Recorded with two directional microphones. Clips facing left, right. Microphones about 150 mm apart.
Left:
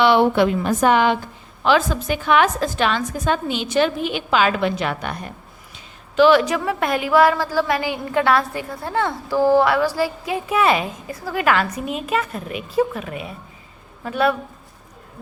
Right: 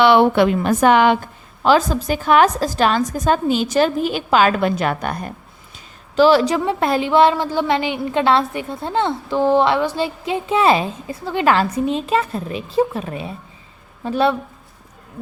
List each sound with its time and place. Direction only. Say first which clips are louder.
0.0 s a woman's voice: right 2 dB; 65° right (ahead or behind)
1.6 s a woman's voice: right 3 dB; 40° right (ahead or behind)
5.7 s a woman's voice: right 1 dB; 35° right (ahead or behind)